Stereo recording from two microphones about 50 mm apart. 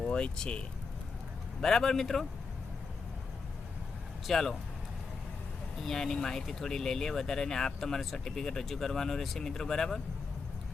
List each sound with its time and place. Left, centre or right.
0.0 s speech: centre
1.6 s speech: centre
4.3 s speech: centre
5.8 s speech: centre